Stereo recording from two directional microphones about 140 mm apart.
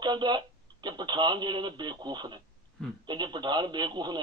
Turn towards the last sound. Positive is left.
turn(degrees=-30)  # may be behind; listen again after turning